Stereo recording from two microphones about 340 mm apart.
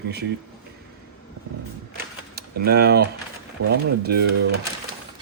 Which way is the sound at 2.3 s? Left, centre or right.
Right.